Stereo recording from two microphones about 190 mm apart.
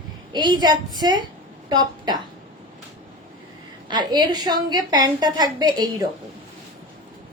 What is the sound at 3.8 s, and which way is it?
A woman's voice, 25° right (ahead or behind).